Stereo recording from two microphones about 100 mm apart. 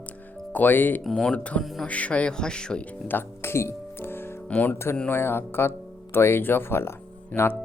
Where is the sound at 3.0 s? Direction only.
20° left (ahead or behind).